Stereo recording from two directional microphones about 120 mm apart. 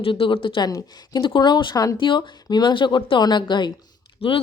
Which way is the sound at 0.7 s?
35° left (ahead or behind).